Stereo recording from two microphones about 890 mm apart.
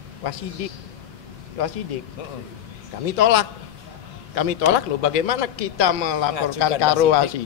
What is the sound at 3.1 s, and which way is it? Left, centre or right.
Speech, left.